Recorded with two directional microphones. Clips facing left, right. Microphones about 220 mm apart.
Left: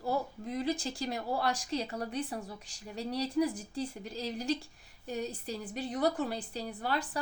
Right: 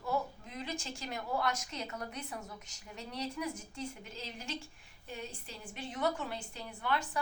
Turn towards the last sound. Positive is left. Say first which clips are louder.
# left 2 dB
turn(degrees=35)  # may be behind; listen again after turning